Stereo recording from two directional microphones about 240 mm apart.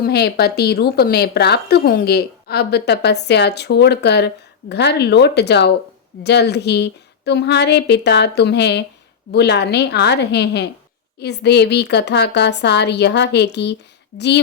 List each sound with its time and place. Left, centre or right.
0.0 s a woman's voice: left